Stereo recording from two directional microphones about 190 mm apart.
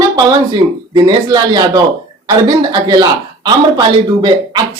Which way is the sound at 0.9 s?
20° right (ahead or behind).